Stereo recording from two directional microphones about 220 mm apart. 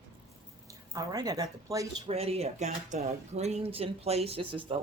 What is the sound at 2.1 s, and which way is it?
Speech, 25° right (ahead or behind).